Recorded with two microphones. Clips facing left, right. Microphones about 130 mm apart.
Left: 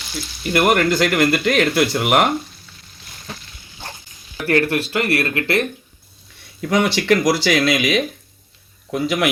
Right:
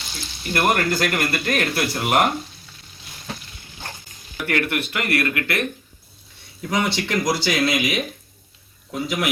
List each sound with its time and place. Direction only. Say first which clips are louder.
0.5 s speech: left 4 dB; 90° left
4.4 s speech: left 5 dB; 35° left (ahead or behind)
6.7 s a man's voice: left 6 dB; 75° left (ahead or behind)